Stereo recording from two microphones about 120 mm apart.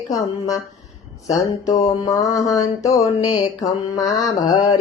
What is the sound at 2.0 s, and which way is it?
Mantra, 30° left (ahead or behind).